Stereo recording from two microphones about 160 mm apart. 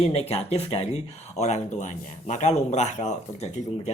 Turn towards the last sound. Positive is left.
turn(degrees=45)  # may be behind; listen again after turning